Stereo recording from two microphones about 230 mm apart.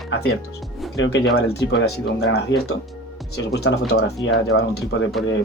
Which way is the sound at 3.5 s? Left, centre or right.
Left.